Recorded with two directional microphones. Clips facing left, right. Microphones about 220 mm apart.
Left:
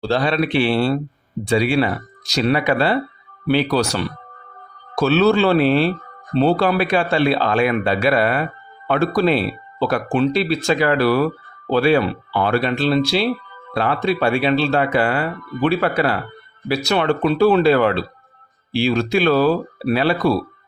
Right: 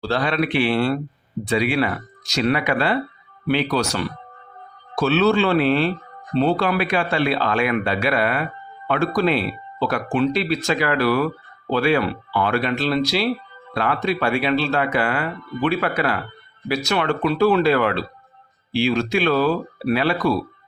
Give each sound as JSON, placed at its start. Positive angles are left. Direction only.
{"t": 0.0, "sound": "speech", "side_deg": 25}
{"t": 4.9, "sound": "speech", "side_deg": 40}